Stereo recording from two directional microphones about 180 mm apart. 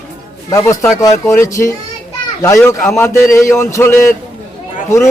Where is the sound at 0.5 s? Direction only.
15° left (ahead or behind).